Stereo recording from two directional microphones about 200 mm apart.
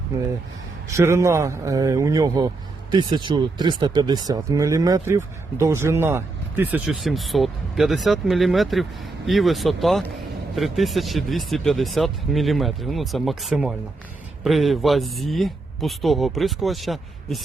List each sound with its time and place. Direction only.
0.9 s speech: 15° right (ahead or behind)